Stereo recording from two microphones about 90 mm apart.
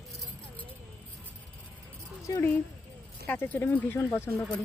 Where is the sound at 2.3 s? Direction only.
35° left (ahead or behind).